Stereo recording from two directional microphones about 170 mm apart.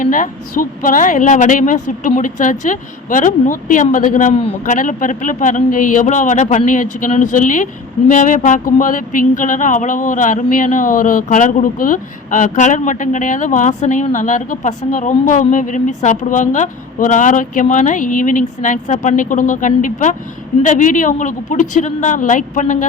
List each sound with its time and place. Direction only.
0.0 s a woman's voice: 50° left (ahead or behind)